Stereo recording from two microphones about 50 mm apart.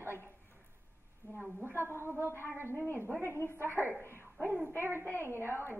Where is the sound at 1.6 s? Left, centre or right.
Right.